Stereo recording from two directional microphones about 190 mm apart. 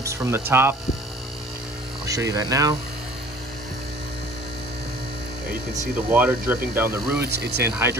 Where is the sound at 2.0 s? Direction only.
15° right (ahead or behind).